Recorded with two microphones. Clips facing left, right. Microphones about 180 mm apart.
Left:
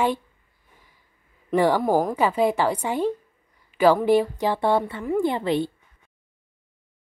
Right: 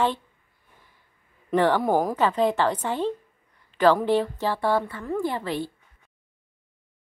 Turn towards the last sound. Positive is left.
turn(degrees=20)  # may be behind; listen again after turning